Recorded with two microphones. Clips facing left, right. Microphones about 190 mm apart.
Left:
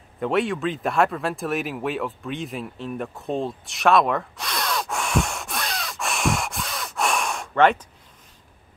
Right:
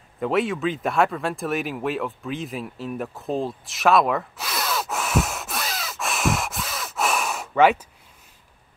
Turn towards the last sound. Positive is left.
turn(degrees=-5)  # may be behind; listen again after turning